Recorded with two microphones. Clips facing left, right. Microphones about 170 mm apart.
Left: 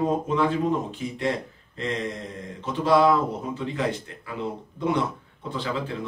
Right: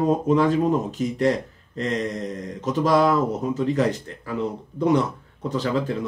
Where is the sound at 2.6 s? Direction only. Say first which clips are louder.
Right 1 dB; 40° right (ahead or behind).